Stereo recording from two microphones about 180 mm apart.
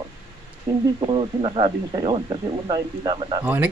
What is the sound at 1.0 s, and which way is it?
Speech, 30° right (ahead or behind).